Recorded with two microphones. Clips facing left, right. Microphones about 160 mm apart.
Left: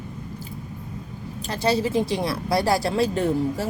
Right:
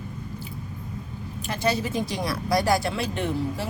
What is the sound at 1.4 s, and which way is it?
Speech, 35° left (ahead or behind).